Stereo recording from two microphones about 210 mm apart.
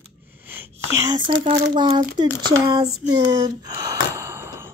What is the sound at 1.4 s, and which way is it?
Speech, 20° right (ahead or behind).